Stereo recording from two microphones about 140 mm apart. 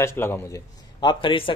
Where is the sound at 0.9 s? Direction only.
35° left (ahead or behind).